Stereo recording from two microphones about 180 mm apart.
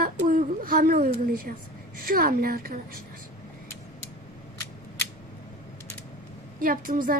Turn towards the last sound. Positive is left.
turn(degrees=-50)  # may be behind; listen again after turning